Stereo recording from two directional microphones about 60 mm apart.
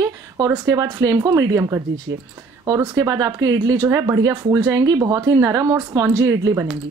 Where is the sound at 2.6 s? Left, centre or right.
Right.